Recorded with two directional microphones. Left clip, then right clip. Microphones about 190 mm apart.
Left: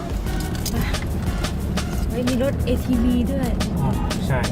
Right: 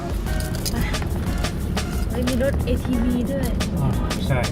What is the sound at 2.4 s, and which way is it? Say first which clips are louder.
Speech: even; 20° left (ahead or behind).